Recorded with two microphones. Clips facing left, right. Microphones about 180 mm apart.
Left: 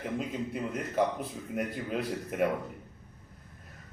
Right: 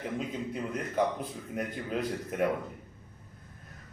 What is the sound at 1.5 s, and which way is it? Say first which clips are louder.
Speech: left 1 dB; 5° left (ahead or behind).